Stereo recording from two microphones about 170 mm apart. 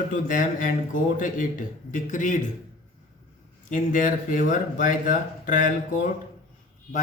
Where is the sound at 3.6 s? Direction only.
50° left (ahead or behind).